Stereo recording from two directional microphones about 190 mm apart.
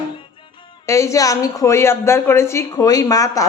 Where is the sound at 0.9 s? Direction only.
15° left (ahead or behind).